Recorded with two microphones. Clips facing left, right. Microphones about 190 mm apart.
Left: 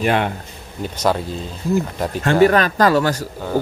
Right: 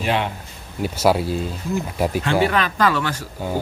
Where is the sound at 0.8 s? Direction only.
10° right (ahead or behind).